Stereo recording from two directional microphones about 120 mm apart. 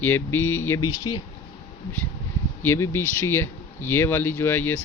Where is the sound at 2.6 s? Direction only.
20° left (ahead or behind).